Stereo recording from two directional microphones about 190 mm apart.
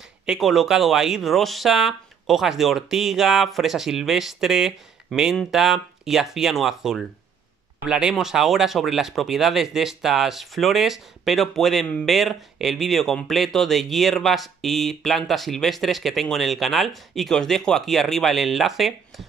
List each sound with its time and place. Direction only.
0.3 s speech: centre (ahead or behind)